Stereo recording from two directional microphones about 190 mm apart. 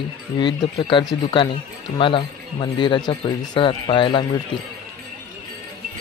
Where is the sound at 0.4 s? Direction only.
25° left (ahead or behind).